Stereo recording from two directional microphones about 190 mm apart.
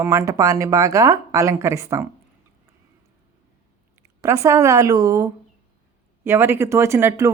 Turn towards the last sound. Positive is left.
turn(degrees=-15)  # may be behind; listen again after turning